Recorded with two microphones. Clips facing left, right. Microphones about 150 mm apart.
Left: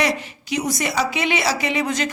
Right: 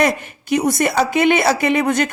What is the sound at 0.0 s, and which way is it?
A woman's voice, 50° right (ahead or behind).